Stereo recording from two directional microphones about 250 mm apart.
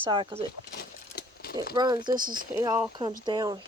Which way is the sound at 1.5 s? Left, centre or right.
Left.